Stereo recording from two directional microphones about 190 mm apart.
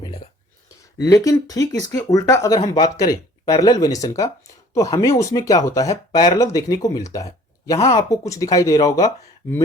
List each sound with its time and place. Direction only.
0.9 s speech: 20° left (ahead or behind)